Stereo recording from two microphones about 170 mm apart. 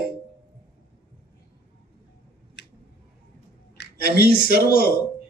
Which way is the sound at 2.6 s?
80° left.